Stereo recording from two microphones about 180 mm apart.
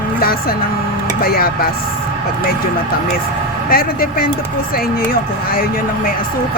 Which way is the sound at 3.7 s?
55° left (ahead or behind).